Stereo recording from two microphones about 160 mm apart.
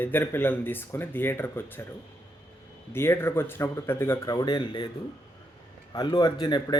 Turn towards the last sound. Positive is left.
turn(degrees=25)  # may be behind; listen again after turning